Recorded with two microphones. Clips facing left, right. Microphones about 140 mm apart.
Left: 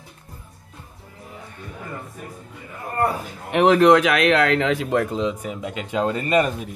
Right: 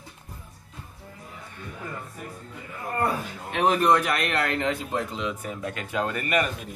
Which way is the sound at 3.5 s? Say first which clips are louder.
Left 7 dB; 85° left.